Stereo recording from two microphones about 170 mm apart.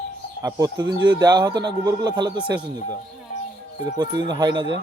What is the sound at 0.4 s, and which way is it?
Speech, 20° right (ahead or behind).